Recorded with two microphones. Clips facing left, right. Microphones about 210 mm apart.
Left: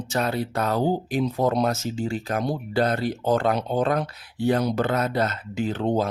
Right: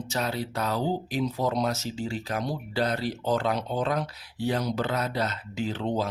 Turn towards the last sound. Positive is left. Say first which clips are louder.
# left 5 dB
turn(degrees=50)  # may be behind; listen again after turning